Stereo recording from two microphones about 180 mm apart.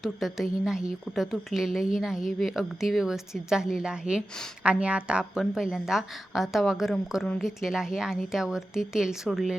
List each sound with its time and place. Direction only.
0.0 s a woman's voice: centre (ahead or behind)